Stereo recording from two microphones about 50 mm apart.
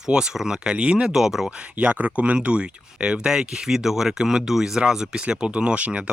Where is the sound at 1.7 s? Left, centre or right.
Right.